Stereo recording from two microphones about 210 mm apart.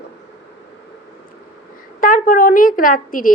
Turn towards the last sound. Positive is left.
turn(degrees=40)  # may be behind; listen again after turning